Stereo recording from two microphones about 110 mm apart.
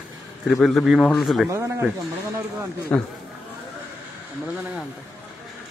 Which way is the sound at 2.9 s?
15° left (ahead or behind).